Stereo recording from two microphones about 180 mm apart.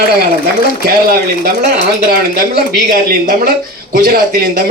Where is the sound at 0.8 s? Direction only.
55° right (ahead or behind).